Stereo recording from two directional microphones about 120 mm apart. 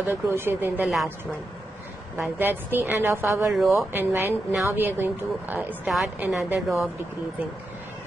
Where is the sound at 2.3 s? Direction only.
15° right (ahead or behind).